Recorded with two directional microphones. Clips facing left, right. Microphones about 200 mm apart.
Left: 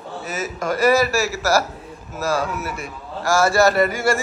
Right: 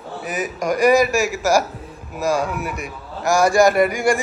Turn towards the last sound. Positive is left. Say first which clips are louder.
# right 2 dB
turn(degrees=-15)  # may be behind; listen again after turning